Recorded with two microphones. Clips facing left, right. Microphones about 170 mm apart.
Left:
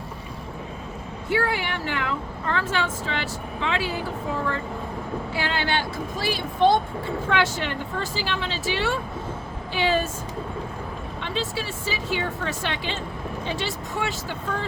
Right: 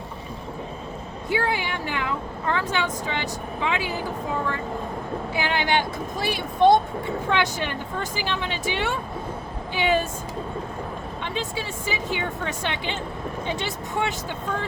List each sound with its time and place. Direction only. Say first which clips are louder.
1.3 s speech: left 1 dB; 20° right (ahead or behind)
5.3 s speech: right 3 dB; 15° right (ahead or behind)
11.2 s a woman's voice: left 2 dB; 15° right (ahead or behind)